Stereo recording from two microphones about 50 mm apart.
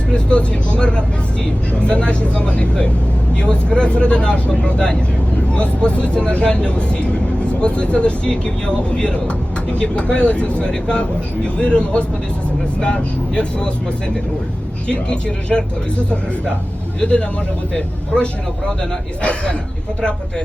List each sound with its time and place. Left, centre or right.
0.1 s speech: left
14.8 s speech: left
17.0 s speech: centre